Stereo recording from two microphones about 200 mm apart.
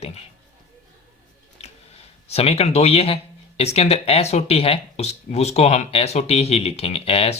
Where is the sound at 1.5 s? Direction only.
30° left (ahead or behind).